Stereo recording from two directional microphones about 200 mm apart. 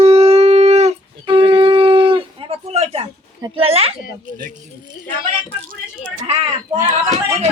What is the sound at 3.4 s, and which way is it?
Speech, 25° right (ahead or behind).